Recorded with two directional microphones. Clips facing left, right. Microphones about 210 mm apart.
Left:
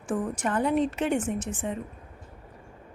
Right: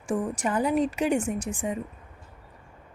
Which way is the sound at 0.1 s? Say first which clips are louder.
Right 1 dB; 5° right (ahead or behind).